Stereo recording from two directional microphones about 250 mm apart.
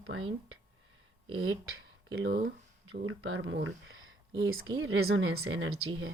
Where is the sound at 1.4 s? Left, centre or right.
Right.